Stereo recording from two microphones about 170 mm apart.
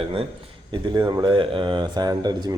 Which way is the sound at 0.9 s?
25° right (ahead or behind).